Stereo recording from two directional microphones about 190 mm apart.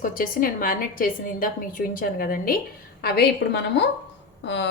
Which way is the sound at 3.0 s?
60° left (ahead or behind).